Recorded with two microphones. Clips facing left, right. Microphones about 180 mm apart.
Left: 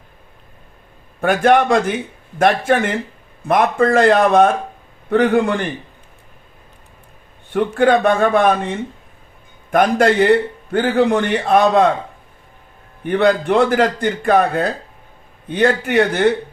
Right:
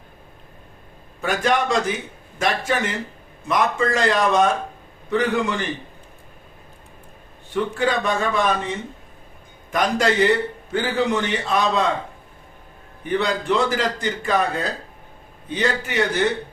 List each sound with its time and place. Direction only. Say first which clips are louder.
1.2 s a man's voice: left 7 dB; 55° left (ahead or behind)
7.5 s a man's voice: left 7 dB; 55° left (ahead or behind)
13.1 s a man's voice: left 7 dB; 55° left (ahead or behind)